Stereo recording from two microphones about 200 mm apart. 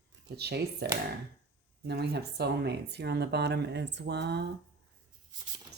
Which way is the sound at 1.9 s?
55° right (ahead or behind).